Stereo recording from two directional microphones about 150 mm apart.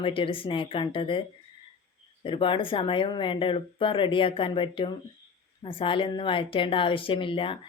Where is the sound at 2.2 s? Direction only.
35° left (ahead or behind).